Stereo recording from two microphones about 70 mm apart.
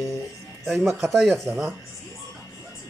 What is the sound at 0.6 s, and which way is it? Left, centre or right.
Speech, centre.